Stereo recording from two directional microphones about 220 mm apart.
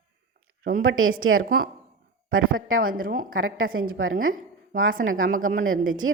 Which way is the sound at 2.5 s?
65° right (ahead or behind).